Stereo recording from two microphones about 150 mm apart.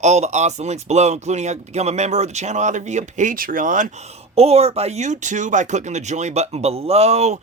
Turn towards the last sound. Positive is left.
turn(degrees=-45)  # may be behind; listen again after turning